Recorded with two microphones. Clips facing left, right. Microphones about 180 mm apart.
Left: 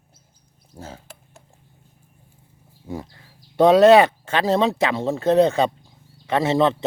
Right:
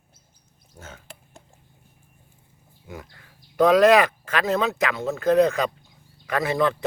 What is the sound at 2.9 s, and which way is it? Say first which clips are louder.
Speech: left 8 dB; 30° left (ahead or behind).